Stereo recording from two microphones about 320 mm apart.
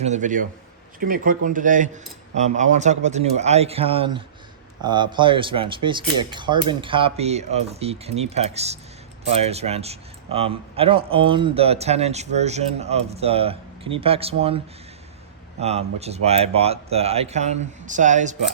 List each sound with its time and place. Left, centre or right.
0.0 s speech: right
15.6 s speech: centre